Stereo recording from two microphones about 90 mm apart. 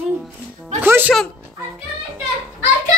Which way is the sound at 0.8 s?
25° right (ahead or behind).